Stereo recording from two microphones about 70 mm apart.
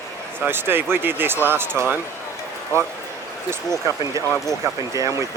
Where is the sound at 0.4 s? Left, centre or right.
Right.